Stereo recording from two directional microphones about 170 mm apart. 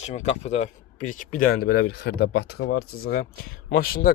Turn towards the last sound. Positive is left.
turn(degrees=60)  # may be behind; listen again after turning